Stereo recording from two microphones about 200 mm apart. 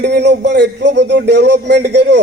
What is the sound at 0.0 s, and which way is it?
A man's voice, 60° right (ahead or behind).